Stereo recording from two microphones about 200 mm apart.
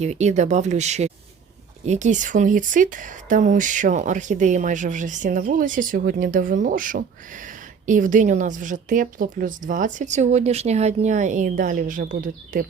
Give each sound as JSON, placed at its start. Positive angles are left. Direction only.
{"t": 0.0, "sound": "speech", "side_deg": -35}